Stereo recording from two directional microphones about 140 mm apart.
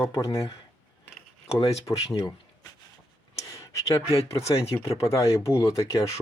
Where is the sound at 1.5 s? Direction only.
45° left (ahead or behind).